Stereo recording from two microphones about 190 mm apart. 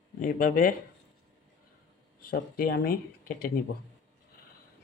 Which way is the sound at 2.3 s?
55° left (ahead or behind).